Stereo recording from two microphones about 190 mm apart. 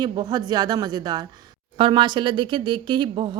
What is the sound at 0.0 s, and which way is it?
Speech, 20° right (ahead or behind).